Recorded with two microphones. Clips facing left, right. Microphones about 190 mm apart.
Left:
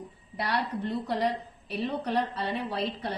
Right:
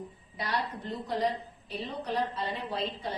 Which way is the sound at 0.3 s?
70° left (ahead or behind).